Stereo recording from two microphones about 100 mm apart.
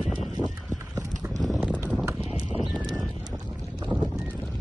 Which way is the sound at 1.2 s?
Centre (ahead or behind).